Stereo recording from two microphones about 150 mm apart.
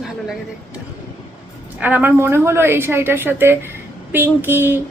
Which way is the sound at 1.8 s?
10° right (ahead or behind).